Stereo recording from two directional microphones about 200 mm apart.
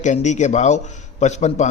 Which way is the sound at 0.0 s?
35° left (ahead or behind).